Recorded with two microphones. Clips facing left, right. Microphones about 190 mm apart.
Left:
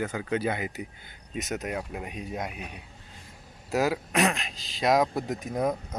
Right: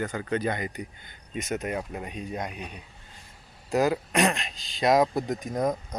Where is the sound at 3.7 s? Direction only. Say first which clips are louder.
Right 2 dB; 5° left (ahead or behind).